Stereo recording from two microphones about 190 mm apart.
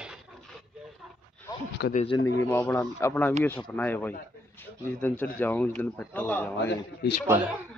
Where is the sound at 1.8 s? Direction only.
65° left (ahead or behind).